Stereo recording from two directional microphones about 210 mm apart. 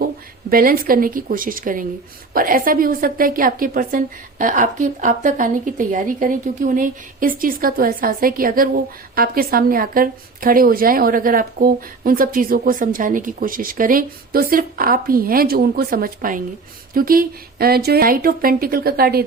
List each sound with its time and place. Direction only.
0.5 s a woman's voice: 45° right (ahead or behind)